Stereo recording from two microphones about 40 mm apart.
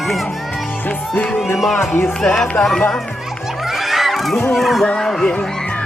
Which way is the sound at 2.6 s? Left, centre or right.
Left.